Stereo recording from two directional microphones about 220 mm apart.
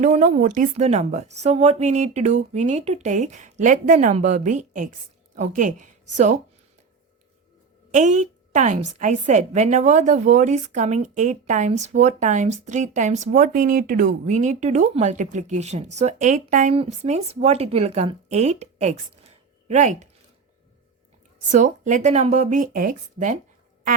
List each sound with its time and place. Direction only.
0.0 s a woman's voice: 30° right (ahead or behind)
7.9 s a woman's voice: 35° right (ahead or behind)
21.5 s a woman's voice: 35° right (ahead or behind)